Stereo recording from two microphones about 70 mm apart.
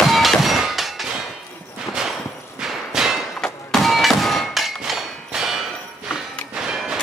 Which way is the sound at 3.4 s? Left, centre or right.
Centre.